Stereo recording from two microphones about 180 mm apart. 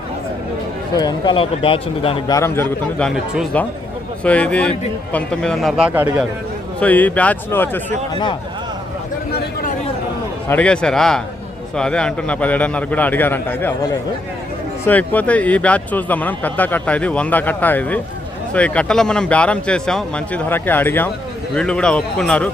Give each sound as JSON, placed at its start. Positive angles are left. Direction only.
{"t": 0.9, "sound": "speech", "side_deg": 25}
{"t": 2.3, "sound": "speech", "side_deg": 15}
{"t": 4.2, "sound": "a man's voice", "side_deg": 5}
{"t": 6.7, "sound": "speech", "side_deg": 10}
{"t": 8.1, "sound": "speech", "side_deg": 25}
{"t": 10.5, "sound": "a man's voice", "side_deg": 5}
{"t": 14.8, "sound": "a man's voice", "side_deg": 10}